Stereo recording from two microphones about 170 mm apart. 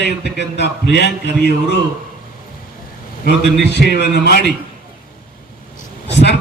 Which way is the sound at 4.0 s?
70° left (ahead or behind).